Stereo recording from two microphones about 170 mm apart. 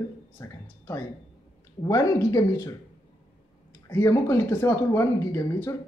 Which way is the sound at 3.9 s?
15° left (ahead or behind).